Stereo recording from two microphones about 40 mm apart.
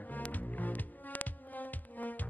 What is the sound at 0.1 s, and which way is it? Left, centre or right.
Music, left.